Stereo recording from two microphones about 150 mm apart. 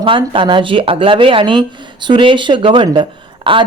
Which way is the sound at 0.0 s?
35° right (ahead or behind).